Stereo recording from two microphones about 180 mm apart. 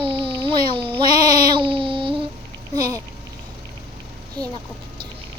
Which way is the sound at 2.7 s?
20° right (ahead or behind).